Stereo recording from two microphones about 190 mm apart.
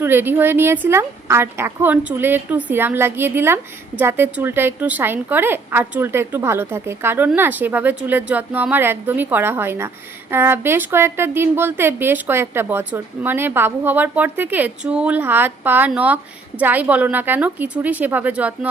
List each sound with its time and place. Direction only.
0.0 s a woman's voice: 10° right (ahead or behind)